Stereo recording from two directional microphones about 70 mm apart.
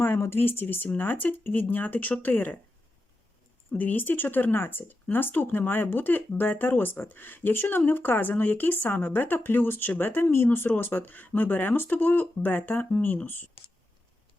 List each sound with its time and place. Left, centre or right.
0.0 s speech: left
3.7 s speech: left